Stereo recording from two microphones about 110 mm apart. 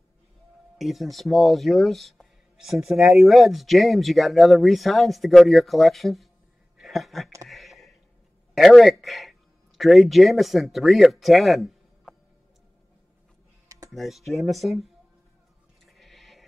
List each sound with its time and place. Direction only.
0.7 s speech: centre (ahead or behind)
6.8 s a sound: centre (ahead or behind)
8.5 s a man's voice: centre (ahead or behind)
13.7 s computer keyboard: 30° right (ahead or behind)
13.9 s speech: centre (ahead or behind)
15.8 s a sound: centre (ahead or behind)